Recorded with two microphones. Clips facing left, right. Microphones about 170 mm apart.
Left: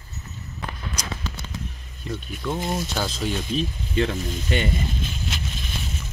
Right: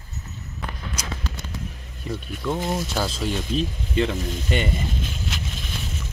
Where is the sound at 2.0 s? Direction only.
5° right (ahead or behind).